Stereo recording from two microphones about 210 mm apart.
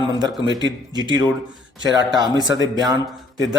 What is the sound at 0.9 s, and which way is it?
Speech, 20° right (ahead or behind).